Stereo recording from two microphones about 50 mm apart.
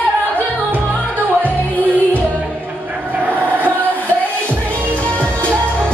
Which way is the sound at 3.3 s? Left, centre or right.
Left.